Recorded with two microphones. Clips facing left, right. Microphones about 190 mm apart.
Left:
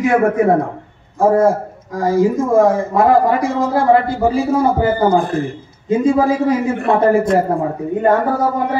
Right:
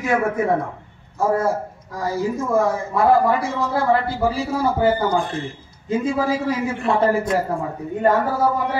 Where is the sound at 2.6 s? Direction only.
55° left (ahead or behind).